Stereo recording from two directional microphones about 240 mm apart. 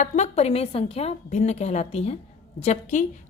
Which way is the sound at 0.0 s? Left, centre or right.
Left.